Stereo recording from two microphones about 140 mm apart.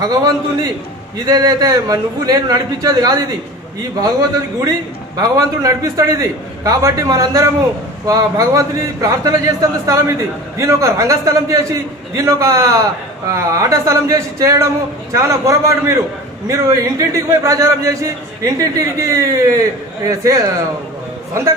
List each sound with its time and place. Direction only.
0.0 s a man's voice: 25° right (ahead or behind)
4.6 s a man's voice: 25° right (ahead or behind)